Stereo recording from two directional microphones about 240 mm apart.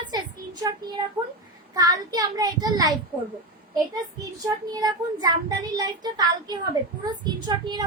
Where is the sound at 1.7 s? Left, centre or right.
Centre.